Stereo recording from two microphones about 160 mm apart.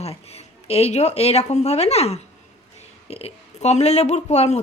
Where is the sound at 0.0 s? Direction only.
40° left (ahead or behind).